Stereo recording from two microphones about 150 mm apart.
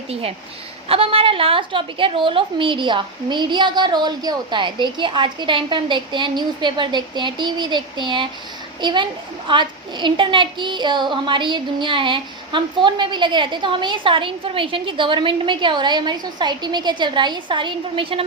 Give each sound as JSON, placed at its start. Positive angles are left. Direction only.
{"t": 0.1, "sound": "a woman's voice", "side_deg": -40}